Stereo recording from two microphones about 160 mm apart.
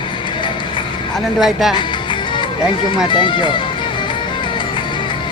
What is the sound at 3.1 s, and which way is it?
Speech, 30° left (ahead or behind).